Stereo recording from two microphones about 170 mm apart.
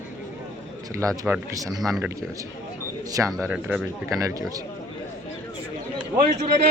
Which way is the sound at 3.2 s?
5° right (ahead or behind).